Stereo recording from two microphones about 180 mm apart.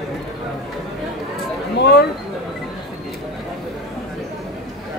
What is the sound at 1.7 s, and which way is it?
Speech, 65° left (ahead or behind).